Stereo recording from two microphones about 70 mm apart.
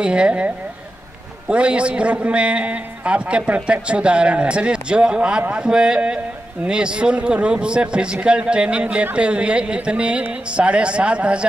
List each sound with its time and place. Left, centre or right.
0.0 s a man's voice: centre
1.5 s a man's voice: centre